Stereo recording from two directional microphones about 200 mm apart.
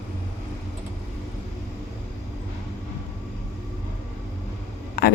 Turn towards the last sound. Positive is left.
turn(degrees=50)  # may be behind; listen again after turning